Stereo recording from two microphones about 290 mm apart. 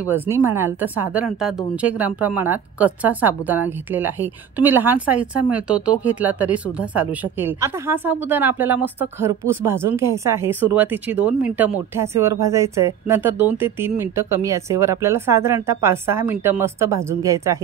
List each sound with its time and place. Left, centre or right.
0.1 s a woman's voice: centre